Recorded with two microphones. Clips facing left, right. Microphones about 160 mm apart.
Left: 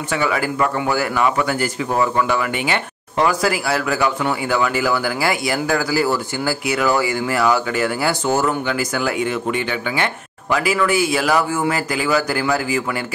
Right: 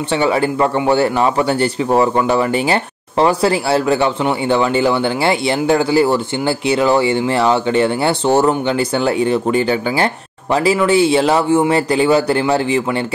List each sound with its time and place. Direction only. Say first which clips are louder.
0.1 s speech: right 5 dB; 30° right (ahead or behind)